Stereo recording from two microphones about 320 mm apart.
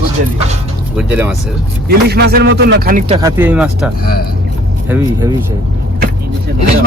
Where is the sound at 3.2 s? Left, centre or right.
Centre.